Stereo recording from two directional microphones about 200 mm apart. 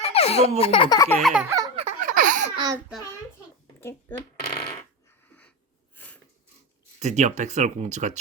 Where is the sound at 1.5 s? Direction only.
20° right (ahead or behind).